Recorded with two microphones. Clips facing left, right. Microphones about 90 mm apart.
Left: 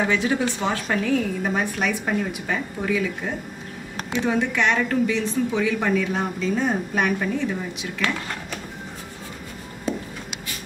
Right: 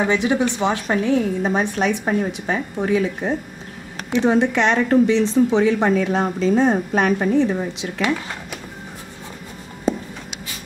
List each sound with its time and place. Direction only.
0.1 s a woman's voice: 20° right (ahead or behind)